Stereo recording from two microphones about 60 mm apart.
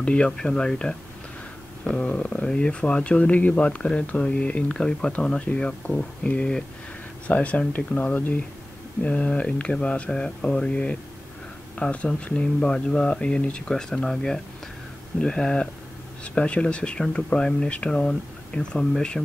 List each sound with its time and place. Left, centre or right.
0.0 s speech: centre